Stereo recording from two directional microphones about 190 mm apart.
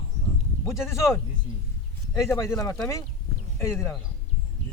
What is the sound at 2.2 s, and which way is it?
Speech, 15° left (ahead or behind).